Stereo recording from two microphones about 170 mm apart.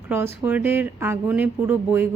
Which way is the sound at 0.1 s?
10° right (ahead or behind).